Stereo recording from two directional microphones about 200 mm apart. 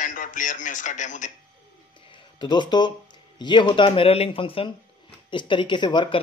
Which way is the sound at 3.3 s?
20° left (ahead or behind).